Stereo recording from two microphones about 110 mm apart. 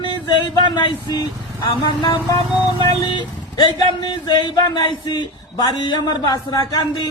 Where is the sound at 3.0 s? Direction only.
45° left (ahead or behind).